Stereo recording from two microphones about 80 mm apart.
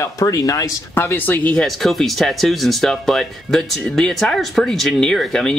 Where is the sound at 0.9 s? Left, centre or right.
Left.